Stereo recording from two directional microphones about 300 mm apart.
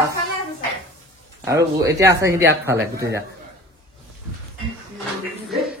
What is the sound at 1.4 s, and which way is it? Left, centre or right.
A man's voice, centre.